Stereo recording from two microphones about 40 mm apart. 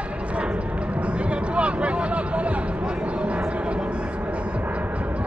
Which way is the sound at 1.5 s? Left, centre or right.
Right.